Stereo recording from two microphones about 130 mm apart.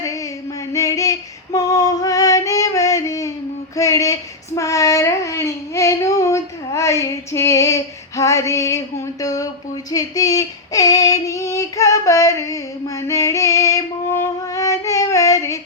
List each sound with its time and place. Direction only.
0.7 s female singing: 25° left (ahead or behind)
3.8 s a sound: 25° left (ahead or behind)
9.9 s female singing: 25° left (ahead or behind)
13.0 s music: 25° left (ahead or behind)